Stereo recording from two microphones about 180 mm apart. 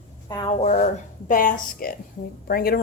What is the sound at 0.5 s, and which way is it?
A woman's voice, 40° left (ahead or behind).